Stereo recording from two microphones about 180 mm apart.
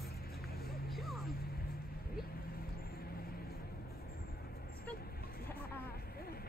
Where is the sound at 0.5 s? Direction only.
55° left (ahead or behind).